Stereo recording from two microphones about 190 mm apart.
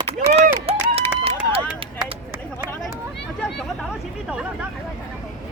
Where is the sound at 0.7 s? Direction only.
30° right (ahead or behind).